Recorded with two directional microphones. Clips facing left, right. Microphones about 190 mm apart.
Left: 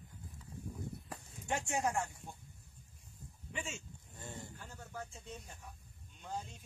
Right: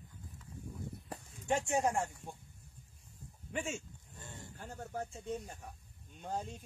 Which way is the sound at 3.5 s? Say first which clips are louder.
Right 6 dB; 50° right (ahead or behind).